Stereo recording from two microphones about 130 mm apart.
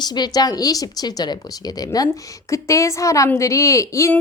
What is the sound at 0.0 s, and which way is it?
Speech, 35° left (ahead or behind).